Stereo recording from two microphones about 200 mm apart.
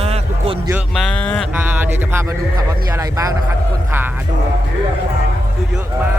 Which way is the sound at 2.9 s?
15° right (ahead or behind).